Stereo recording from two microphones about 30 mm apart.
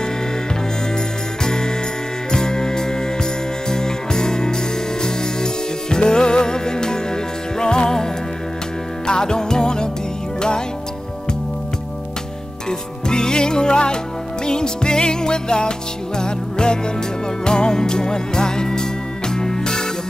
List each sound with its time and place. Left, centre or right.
1.4 s jingle bell: left
2.3 s music: left
12.6 s music: left